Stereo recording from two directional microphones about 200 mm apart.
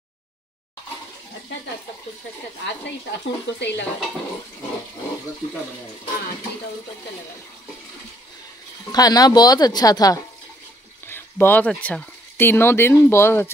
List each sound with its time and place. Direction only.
2.6 s speech: 60° left (ahead or behind)
8.9 s speech: 20° left (ahead or behind)